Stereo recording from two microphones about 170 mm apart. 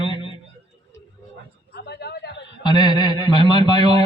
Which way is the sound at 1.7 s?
75° left (ahead or behind).